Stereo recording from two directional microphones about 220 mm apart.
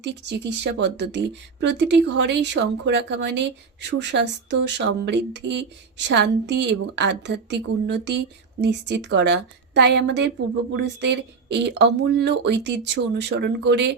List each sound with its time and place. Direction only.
0.0 s speech: 50° right (ahead or behind)